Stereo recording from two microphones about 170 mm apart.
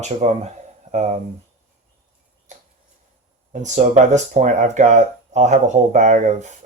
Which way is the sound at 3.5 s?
45° right (ahead or behind).